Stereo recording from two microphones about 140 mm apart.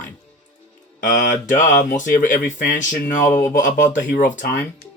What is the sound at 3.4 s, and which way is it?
Speech, 80° left.